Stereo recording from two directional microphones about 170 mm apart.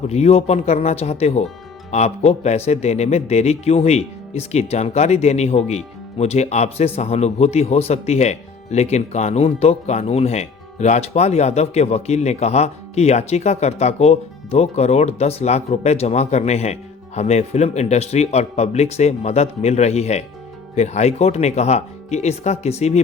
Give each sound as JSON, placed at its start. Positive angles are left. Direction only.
{"t": 0.1, "sound": "speech", "side_deg": 40}